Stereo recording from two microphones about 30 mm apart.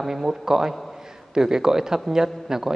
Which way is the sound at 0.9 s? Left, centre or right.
Centre.